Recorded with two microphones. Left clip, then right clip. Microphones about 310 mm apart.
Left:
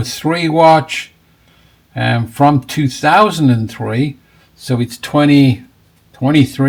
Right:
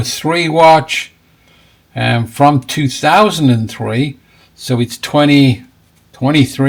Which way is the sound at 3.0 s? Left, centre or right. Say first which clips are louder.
Even; right.